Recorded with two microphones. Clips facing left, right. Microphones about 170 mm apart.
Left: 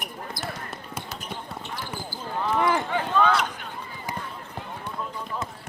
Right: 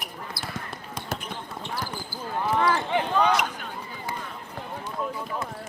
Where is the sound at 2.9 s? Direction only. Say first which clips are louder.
Even; 15° right (ahead or behind).